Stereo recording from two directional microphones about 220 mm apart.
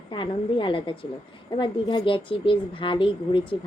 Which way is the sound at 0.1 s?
20° left (ahead or behind).